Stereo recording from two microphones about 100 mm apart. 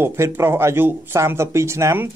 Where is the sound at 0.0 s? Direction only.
25° right (ahead or behind).